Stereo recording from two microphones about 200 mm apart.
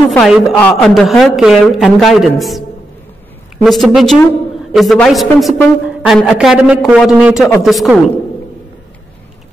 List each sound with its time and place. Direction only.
0.1 s a woman's voice: centre (ahead or behind)
3.6 s a woman's voice: centre (ahead or behind)